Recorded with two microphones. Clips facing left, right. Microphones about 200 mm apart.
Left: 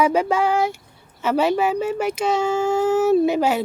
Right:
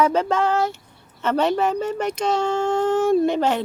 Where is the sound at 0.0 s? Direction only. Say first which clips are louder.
Left 1 dB; 10° left (ahead or behind).